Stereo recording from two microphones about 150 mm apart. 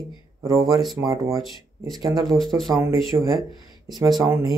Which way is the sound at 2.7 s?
25° right (ahead or behind).